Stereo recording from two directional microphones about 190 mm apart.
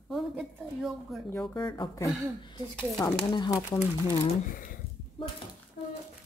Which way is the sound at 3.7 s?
40° left (ahead or behind).